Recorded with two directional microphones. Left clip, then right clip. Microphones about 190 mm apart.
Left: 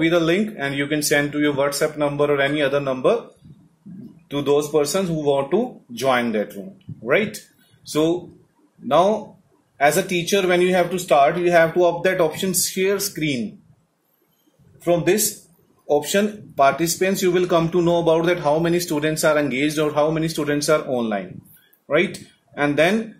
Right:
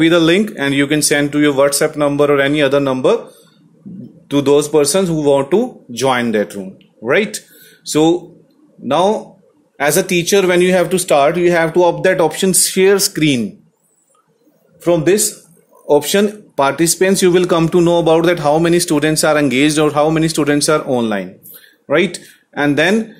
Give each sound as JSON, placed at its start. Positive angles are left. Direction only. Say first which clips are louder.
{"t": 0.0, "sound": "speech", "louder": "right 7 dB", "side_deg": -55}
{"t": 4.3, "sound": "speech", "louder": "right 7 dB", "side_deg": -55}
{"t": 15.9, "sound": "speech", "louder": "right 7 dB", "side_deg": -55}